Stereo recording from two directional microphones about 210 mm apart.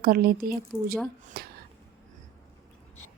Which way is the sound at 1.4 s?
45° right (ahead or behind).